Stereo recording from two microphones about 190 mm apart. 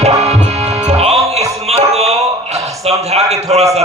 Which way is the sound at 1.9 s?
35° right (ahead or behind).